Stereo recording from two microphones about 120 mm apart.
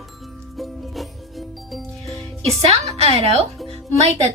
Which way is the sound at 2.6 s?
60° right (ahead or behind).